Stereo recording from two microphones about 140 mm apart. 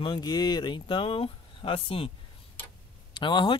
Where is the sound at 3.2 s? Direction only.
35° left (ahead or behind).